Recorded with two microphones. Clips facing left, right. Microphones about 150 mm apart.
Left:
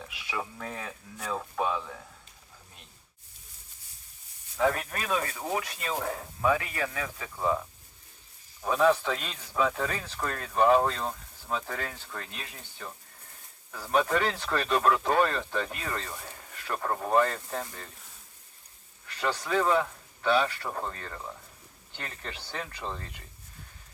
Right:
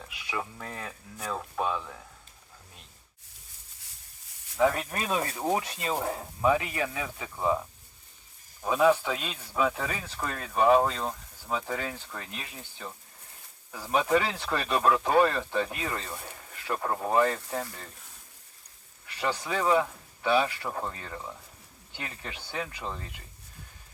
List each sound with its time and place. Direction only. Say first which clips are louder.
0.1 s speech: right 1 dB; centre (ahead or behind)
4.5 s speech: right 2 dB; 15° right (ahead or behind)
8.6 s speech: right 1 dB; 10° right (ahead or behind)
19.0 s speech: even; 10° right (ahead or behind)